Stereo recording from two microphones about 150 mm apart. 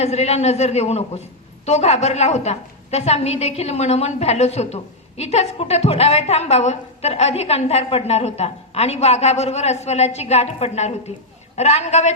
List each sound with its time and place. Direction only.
0.0 s a woman's voice: 45° left (ahead or behind)